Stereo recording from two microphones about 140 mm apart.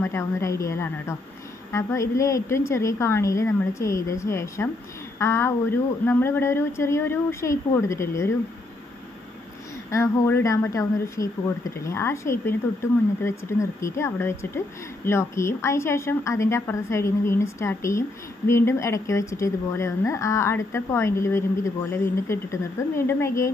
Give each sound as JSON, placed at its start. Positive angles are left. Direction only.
{"t": 0.0, "sound": "speech", "side_deg": 20}
{"t": 9.8, "sound": "speech", "side_deg": 20}